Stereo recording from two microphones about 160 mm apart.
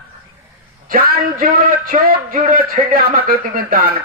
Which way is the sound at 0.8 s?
60° right (ahead or behind).